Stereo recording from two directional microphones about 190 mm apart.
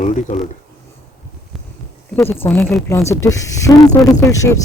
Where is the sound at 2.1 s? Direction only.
10° left (ahead or behind).